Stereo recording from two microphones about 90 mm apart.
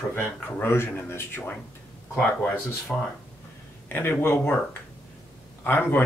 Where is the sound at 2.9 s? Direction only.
10° left (ahead or behind).